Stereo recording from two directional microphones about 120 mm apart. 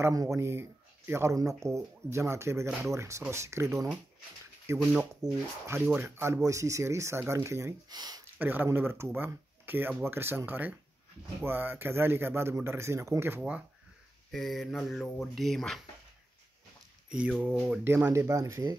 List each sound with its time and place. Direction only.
0.0 s a man's voice: 25° right (ahead or behind)
5.9 s speech: 15° right (ahead or behind)
7.9 s speech: 35° right (ahead or behind)
8.4 s speech: 15° right (ahead or behind)
14.3 s speech: centre (ahead or behind)
17.1 s speech: 10° right (ahead or behind); by 18.8 s 30° right (ahead or behind)